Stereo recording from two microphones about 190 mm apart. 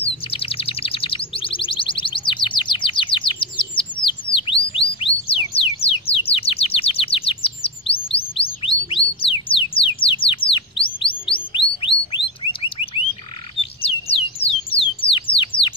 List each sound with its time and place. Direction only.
0.0 s chirp: 30° left (ahead or behind)
11.5 s bird: 25° left (ahead or behind)
13.8 s a sound: 30° left (ahead or behind)